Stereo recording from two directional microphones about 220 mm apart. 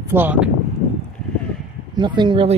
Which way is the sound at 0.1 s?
10° right (ahead or behind).